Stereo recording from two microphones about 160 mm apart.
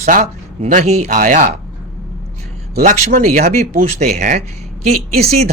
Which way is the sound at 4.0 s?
45° right (ahead or behind).